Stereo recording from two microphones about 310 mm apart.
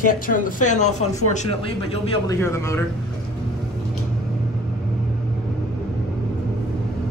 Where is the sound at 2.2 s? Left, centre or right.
Centre.